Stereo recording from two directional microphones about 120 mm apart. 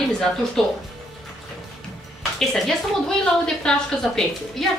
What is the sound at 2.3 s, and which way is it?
A woman's voice, centre (ahead or behind).